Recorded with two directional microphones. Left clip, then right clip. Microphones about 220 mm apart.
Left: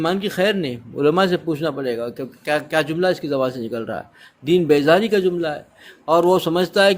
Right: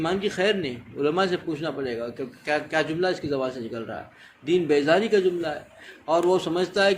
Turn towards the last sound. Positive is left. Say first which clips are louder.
# left 6 dB
turn(degrees=50)  # may be behind; listen again after turning